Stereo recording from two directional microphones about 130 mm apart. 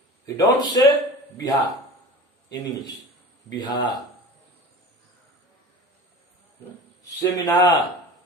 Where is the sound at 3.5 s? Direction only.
35° left (ahead or behind).